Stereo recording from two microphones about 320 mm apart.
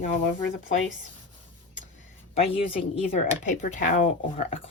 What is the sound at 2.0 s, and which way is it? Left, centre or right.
Speech, centre.